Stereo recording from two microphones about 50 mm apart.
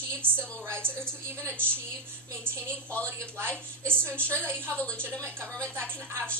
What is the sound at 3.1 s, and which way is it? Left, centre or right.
Speech, right.